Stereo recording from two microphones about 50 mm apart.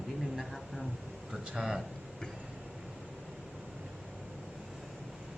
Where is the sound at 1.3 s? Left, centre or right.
Centre.